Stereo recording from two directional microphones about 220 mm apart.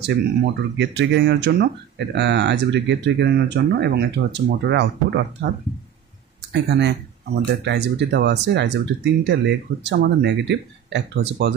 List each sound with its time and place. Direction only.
0.7 s speech: 50° right (ahead or behind)
6.5 s speech: 50° right (ahead or behind)